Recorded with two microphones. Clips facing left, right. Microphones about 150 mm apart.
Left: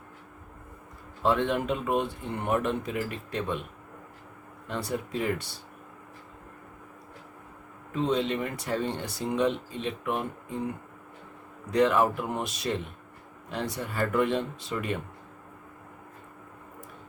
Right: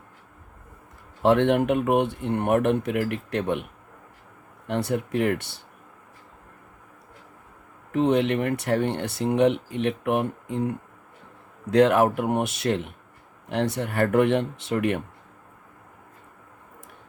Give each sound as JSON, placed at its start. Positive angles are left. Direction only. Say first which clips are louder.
{"t": 1.2, "sound": "speech", "louder": "right 7 dB", "side_deg": -70}
{"t": 7.9, "sound": "speech", "louder": "right 6 dB", "side_deg": -65}